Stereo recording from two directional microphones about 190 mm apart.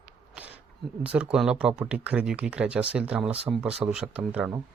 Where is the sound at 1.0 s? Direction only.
5° right (ahead or behind).